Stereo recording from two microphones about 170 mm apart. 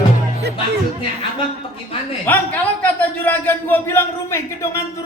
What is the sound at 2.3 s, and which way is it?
Speech, 10° left (ahead or behind).